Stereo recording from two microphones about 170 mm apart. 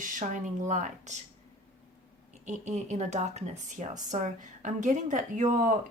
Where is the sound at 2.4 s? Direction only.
45° right (ahead or behind).